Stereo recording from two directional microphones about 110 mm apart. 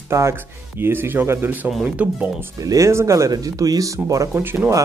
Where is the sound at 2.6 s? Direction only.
30° right (ahead or behind).